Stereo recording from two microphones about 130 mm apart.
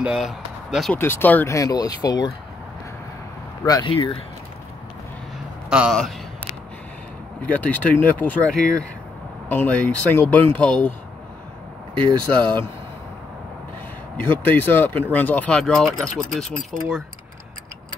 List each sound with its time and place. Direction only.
0.0 s speech: 5° right (ahead or behind)
0.9 s speech: 15° left (ahead or behind); by 2.3 s 35° left (ahead or behind)
3.6 s speech: 30° left (ahead or behind)
3.9 s speech: 45° left (ahead or behind)
5.7 s a man's voice: 10° right (ahead or behind)
7.4 s speech: 10° left (ahead or behind)
12.0 s speech: 35° right (ahead or behind)
14.1 s speech: 15° left (ahead or behind)